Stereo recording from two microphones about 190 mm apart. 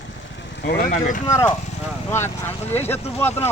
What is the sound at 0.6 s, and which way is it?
Speech, 50° left (ahead or behind).